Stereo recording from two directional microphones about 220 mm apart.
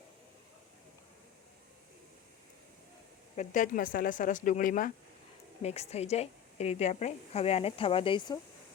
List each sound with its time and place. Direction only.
3.3 s a woman's voice: 35° left (ahead or behind)